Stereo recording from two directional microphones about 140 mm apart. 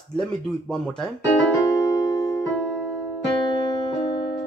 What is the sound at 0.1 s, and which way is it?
Speech, 5° left (ahead or behind).